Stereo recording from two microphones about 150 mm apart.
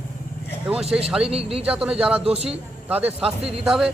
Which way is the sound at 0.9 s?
5° right (ahead or behind).